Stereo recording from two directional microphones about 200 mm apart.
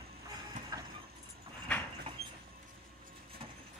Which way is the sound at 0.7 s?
15° right (ahead or behind).